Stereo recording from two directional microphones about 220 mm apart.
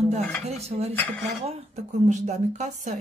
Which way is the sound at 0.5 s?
30° right (ahead or behind).